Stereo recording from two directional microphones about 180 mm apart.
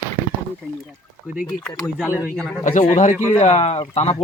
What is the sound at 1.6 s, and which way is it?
Speech, 5° left (ahead or behind).